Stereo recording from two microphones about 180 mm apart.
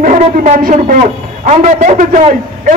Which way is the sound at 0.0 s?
45° right (ahead or behind).